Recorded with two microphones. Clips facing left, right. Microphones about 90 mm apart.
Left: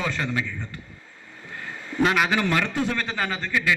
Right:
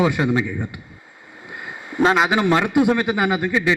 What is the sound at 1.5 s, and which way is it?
Vehicle, 15° right (ahead or behind).